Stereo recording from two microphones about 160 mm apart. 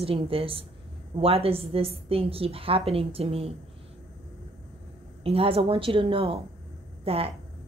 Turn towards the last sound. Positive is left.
turn(degrees=-35)  # may be behind; listen again after turning